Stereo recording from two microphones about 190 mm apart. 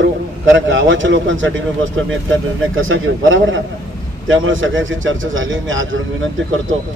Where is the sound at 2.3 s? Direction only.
90° right.